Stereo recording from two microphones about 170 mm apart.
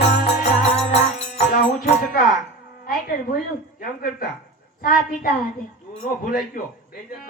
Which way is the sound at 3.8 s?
60° left (ahead or behind).